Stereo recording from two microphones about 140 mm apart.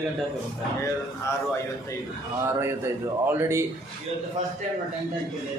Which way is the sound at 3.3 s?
20° right (ahead or behind).